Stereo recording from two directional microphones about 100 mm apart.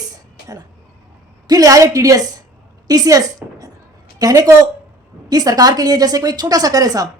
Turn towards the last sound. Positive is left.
turn(degrees=-40)  # may be behind; listen again after turning